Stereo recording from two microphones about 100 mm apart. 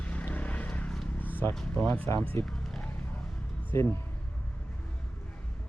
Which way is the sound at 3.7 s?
25° left (ahead or behind).